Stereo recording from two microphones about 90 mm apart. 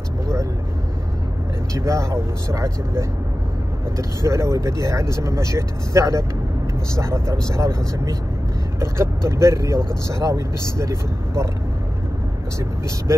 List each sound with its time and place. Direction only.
1.7 s speech: 35° right (ahead or behind)